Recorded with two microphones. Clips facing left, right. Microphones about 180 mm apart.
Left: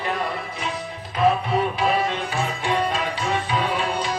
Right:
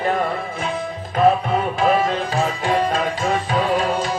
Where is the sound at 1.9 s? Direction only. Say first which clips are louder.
Right 4 dB; 40° right (ahead or behind).